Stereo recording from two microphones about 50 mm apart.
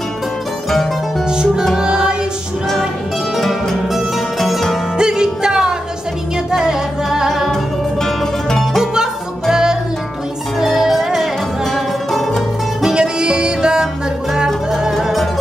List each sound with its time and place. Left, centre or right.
1.8 s music: centre
3.3 s music: centre
4.9 s music: centre
8.0 s music: centre
8.9 s music: centre
12.9 s music: centre
15.0 s music: centre